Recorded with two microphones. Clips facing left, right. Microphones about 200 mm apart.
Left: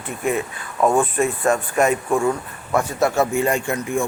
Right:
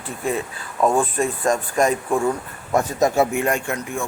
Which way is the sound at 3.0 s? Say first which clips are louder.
Right 1 dB; 15° right (ahead or behind).